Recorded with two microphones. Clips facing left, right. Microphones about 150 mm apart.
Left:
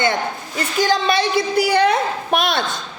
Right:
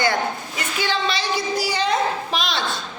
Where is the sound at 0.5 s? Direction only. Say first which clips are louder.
Left 9 dB; 40° left (ahead or behind).